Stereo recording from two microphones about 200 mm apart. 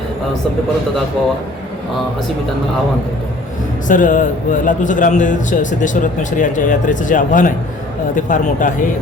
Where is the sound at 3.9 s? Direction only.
40° left (ahead or behind).